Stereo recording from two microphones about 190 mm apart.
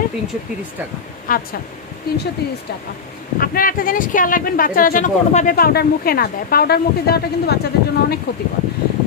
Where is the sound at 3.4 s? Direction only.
45° left (ahead or behind).